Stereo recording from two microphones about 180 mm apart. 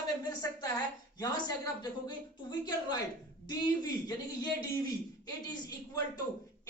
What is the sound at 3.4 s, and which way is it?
Speech, 20° left (ahead or behind).